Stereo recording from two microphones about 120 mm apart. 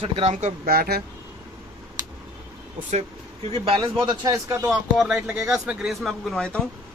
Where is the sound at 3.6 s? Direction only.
50° right (ahead or behind).